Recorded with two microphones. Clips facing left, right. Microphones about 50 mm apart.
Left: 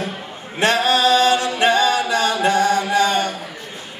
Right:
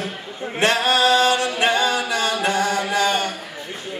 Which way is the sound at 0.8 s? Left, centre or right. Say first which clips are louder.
Left 2 dB; right.